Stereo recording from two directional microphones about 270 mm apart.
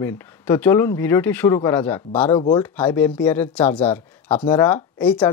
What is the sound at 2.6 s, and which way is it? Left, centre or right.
Speech, centre.